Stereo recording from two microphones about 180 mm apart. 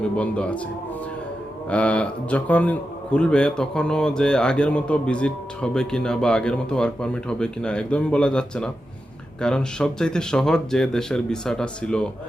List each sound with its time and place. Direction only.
0.2 s speech: 5° left (ahead or behind)
1.7 s a man's voice: 5° left (ahead or behind)